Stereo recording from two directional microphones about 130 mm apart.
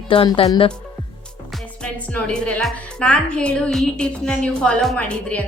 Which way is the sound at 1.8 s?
5° left (ahead or behind).